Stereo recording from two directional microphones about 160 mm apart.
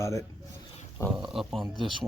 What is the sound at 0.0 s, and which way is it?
Speech, 20° left (ahead or behind).